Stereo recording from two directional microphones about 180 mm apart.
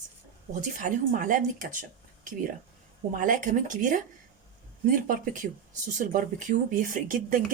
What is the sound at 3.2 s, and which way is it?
Speech, 45° right (ahead or behind).